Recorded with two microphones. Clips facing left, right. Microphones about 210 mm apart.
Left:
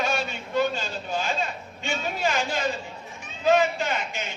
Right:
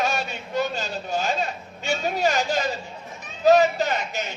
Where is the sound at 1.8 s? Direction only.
40° right (ahead or behind).